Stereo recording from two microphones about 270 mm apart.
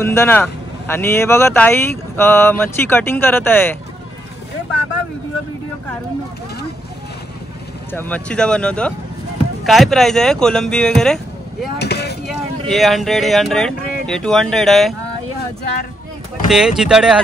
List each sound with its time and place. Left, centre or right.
0.0 s speech: centre
7.9 s speech: centre
11.8 s boat: left
12.3 s speech: centre
16.4 s speech: centre